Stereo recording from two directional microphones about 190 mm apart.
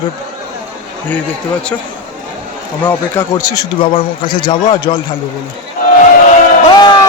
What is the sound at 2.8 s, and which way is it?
A man's voice, 15° left (ahead or behind).